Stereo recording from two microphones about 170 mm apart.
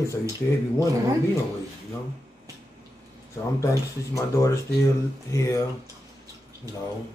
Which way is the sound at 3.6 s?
20° left (ahead or behind).